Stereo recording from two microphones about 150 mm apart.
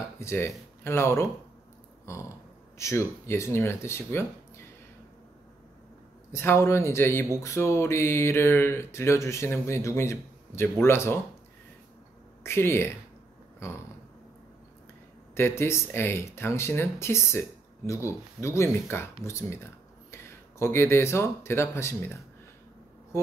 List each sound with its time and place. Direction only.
0.2 s speech: 15° left (ahead or behind)
2.1 s burping: 20° left (ahead or behind)
2.8 s speech: 20° left (ahead or behind)
6.3 s speech: 15° left (ahead or behind)
12.4 s speech: 15° left (ahead or behind)
13.6 s a sound: 20° left (ahead or behind)
15.3 s speech: 15° left (ahead or behind)